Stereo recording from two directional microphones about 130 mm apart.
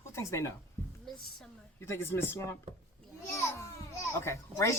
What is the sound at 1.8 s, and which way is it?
A child's voice, 20° left (ahead or behind).